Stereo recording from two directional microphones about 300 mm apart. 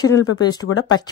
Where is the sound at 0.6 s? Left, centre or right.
Left.